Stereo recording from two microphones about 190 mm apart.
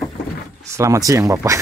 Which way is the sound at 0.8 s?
15° right (ahead or behind).